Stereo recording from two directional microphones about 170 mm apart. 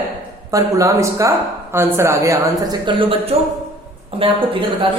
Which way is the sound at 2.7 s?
30° right (ahead or behind).